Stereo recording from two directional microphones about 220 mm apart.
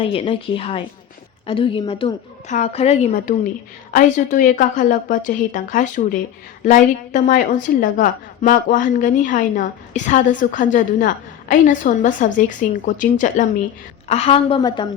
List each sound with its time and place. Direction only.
0.0 s a woman's voice: 25° left (ahead or behind)